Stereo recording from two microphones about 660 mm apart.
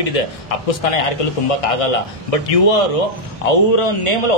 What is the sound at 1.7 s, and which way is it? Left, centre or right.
Speech, left.